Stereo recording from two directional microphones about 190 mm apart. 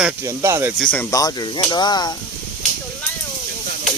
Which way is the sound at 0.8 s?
10° left (ahead or behind).